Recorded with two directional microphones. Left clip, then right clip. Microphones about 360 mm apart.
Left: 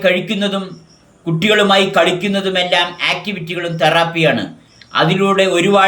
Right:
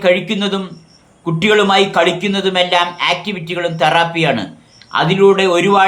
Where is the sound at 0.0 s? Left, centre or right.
Centre.